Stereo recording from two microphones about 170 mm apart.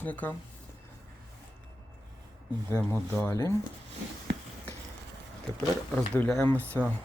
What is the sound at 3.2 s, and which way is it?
Speech, 15° left (ahead or behind).